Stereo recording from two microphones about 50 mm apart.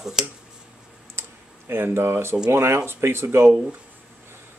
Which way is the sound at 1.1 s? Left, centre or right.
Right.